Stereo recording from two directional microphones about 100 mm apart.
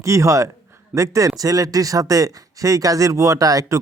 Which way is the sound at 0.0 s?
30° right (ahead or behind).